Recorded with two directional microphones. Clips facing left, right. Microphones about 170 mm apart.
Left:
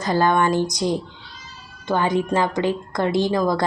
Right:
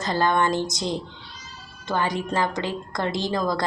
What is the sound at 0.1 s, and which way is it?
Speech, 15° left (ahead or behind).